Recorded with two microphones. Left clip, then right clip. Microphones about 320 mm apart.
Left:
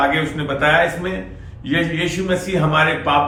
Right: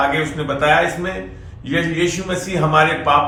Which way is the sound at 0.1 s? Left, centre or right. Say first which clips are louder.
Even; centre.